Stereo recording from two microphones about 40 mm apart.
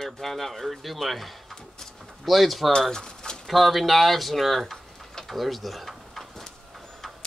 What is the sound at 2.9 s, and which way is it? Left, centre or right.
Pigeon, centre.